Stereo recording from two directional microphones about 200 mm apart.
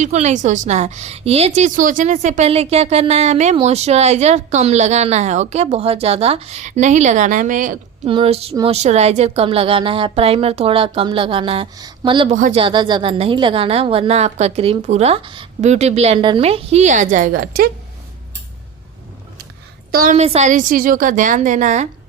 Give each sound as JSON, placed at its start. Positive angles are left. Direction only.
{"t": 0.0, "sound": "a woman's voice", "side_deg": -35}
{"t": 8.0, "sound": "speech", "side_deg": -30}
{"t": 12.4, "sound": "a woman's voice", "side_deg": -35}
{"t": 12.6, "sound": "a woman's voice", "side_deg": -25}
{"t": 19.9, "sound": "a woman's voice", "side_deg": -45}
{"t": 20.1, "sound": "a woman's voice", "side_deg": -30}